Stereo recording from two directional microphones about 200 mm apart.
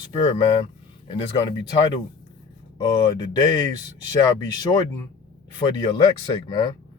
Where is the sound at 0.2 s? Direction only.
25° left (ahead or behind).